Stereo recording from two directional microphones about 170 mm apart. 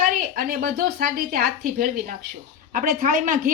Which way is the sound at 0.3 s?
65° right (ahead or behind).